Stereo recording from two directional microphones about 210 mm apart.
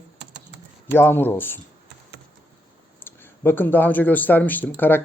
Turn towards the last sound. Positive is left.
turn(degrees=10)  # may be behind; listen again after turning